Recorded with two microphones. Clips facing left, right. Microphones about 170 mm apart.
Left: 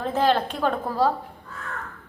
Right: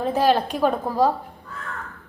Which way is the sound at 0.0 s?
10° right (ahead or behind).